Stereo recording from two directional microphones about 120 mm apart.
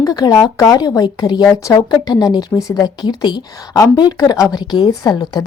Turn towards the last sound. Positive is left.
turn(degrees=35)  # may be behind; listen again after turning